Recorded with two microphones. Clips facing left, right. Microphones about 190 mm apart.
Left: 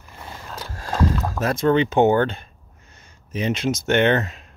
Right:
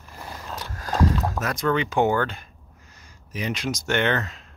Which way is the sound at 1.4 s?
25° left (ahead or behind).